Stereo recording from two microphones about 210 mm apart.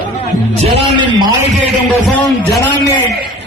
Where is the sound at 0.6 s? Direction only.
20° right (ahead or behind).